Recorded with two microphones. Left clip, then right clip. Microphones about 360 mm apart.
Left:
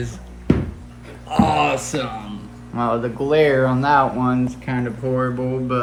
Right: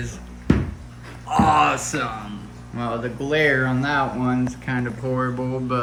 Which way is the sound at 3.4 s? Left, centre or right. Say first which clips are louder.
Left 4 dB; left.